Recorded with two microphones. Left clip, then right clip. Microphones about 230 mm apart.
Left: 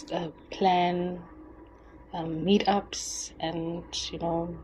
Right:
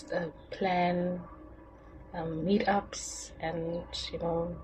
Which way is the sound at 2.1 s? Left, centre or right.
Left.